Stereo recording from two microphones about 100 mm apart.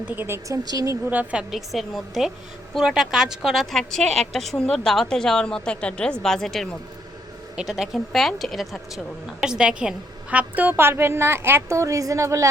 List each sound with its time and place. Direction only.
0.1 s a woman's voice: 20° right (ahead or behind)
0.4 s speech: 35° right (ahead or behind)
1.1 s a woman's voice: 15° right (ahead or behind); by 12.5 s 30° right (ahead or behind)